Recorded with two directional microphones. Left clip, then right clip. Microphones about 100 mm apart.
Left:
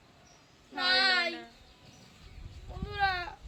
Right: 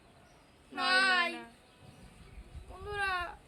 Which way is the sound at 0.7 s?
45° right (ahead or behind).